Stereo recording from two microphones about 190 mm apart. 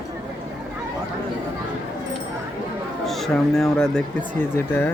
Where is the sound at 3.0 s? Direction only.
Centre (ahead or behind).